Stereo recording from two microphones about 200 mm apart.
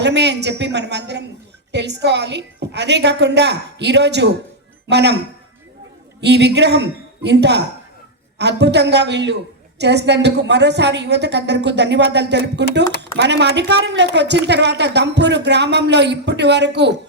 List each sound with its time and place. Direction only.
0.0 s a woman's voice: 60° right (ahead or behind)